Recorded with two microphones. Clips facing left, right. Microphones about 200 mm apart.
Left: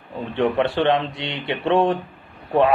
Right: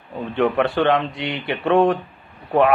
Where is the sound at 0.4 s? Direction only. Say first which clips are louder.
Right 1 dB; 25° left (ahead or behind).